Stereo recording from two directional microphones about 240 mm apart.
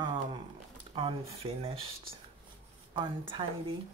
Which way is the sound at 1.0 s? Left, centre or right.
Right.